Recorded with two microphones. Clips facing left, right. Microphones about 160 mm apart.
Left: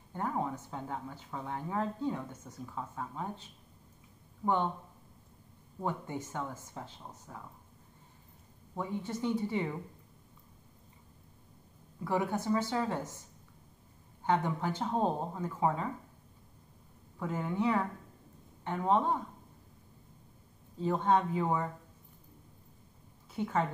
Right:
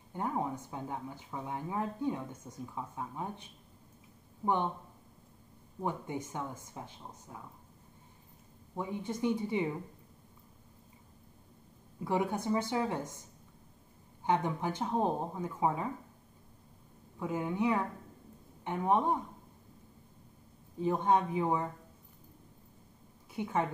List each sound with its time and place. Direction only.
0.1 s speech: 15° right (ahead or behind)
5.9 s speech: 15° right (ahead or behind)
8.7 s speech: 15° right (ahead or behind)
12.0 s speech: 20° right (ahead or behind)
14.2 s speech: 15° right (ahead or behind)
17.2 s speech: 15° right (ahead or behind)
20.8 s speech: 15° right (ahead or behind)
23.3 s speech: 15° right (ahead or behind)